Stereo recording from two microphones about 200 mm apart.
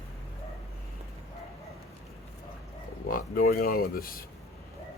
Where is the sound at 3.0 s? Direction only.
45° left (ahead or behind).